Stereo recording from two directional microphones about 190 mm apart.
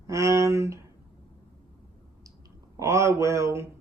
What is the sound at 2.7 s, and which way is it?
Speech, 15° right (ahead or behind).